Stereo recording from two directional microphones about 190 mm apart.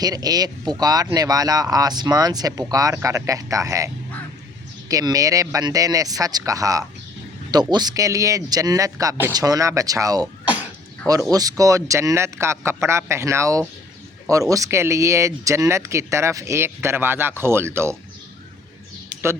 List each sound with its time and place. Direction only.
0.0 s speech: 20° right (ahead or behind)